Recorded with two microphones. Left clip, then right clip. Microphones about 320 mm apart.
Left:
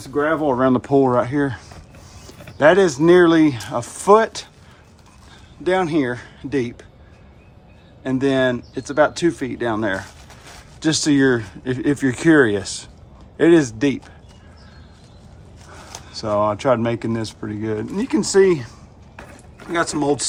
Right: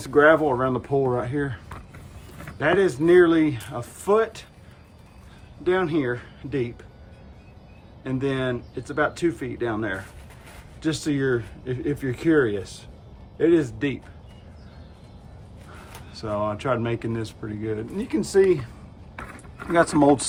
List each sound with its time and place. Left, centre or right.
0.4 s speech: left
5.6 s speech: centre
8.0 s speech: centre
16.1 s speech: centre
19.7 s speech: centre